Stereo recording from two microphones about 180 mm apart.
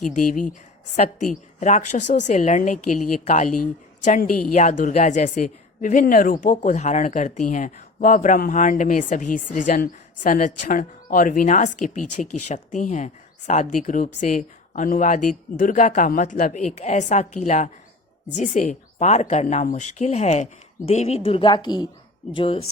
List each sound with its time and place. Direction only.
0.1 s a woman's voice: 50° left (ahead or behind); by 22.6 s 30° left (ahead or behind)